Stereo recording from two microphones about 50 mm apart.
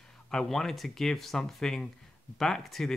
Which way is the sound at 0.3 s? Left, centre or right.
Centre.